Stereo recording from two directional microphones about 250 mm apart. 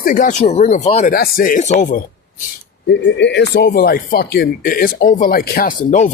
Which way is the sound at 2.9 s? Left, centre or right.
Left.